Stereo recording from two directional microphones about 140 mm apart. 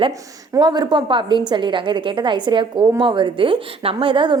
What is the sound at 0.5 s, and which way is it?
A woman's voice, 30° right (ahead or behind).